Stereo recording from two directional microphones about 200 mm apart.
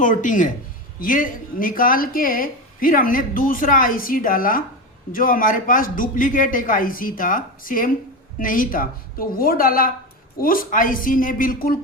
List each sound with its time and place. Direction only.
0.0 s speech: 40° left (ahead or behind)